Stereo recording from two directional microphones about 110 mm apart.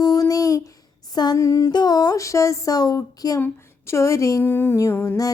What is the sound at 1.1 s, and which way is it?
Female singing, 40° left (ahead or behind).